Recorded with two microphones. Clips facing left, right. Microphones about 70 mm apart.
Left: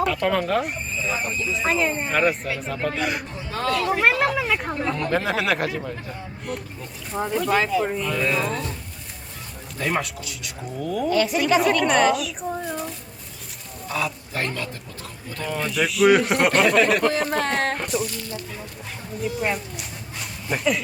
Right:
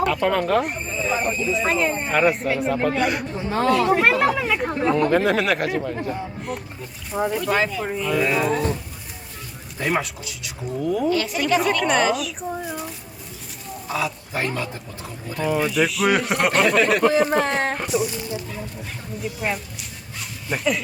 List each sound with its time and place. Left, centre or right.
0.0 s speech: centre
1.1 s speech: right
1.5 s speech: centre
9.7 s speech: centre
10.8 s speech: centre
11.1 s speech: centre
14.5 s speech: centre
18.1 s speech: centre
19.4 s speech: centre
20.1 s dog: centre